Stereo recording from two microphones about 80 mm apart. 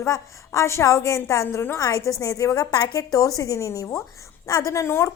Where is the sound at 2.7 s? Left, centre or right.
Left.